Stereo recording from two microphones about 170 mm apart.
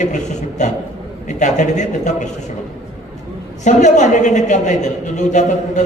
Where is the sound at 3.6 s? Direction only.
45° left (ahead or behind).